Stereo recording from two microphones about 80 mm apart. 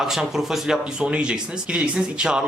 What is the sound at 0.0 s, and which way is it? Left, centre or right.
A man's voice, centre.